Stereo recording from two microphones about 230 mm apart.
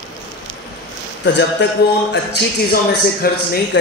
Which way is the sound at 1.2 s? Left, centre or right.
Left.